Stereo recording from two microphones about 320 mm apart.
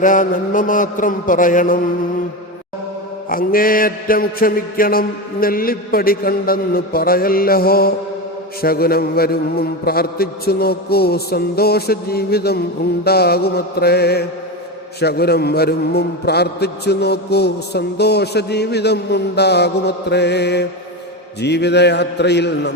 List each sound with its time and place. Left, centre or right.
0.0 s mantra: left
3.2 s mantra: left
15.0 s a man's voice: left